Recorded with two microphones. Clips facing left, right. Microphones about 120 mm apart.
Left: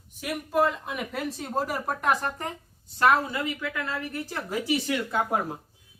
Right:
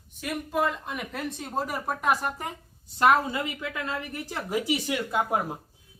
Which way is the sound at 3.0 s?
20° right (ahead or behind).